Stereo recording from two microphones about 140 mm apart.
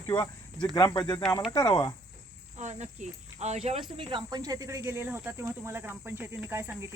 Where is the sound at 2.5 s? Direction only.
55° right (ahead or behind).